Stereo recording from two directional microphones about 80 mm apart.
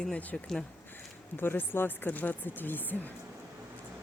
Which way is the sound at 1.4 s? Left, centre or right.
Left.